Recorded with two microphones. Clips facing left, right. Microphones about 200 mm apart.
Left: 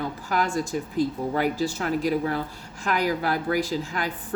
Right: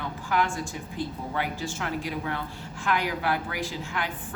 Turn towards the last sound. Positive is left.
turn(degrees=40)  # may be behind; listen again after turning